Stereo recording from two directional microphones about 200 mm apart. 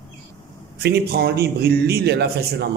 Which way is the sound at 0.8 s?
55° right (ahead or behind).